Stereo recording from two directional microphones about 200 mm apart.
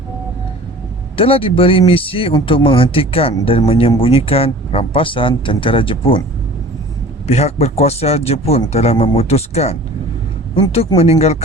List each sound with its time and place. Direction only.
1.1 s speech: 25° left (ahead or behind)
7.3 s speech: 30° left (ahead or behind)